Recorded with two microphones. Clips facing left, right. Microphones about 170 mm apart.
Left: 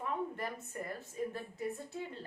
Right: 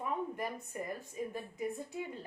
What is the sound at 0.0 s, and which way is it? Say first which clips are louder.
A woman's voice: right 1 dB; 15° right (ahead or behind).